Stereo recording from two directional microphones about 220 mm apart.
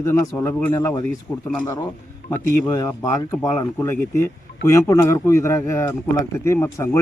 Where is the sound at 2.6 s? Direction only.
15° left (ahead or behind).